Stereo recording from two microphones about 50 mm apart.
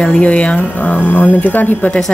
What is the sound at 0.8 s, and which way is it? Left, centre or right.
Speech, left.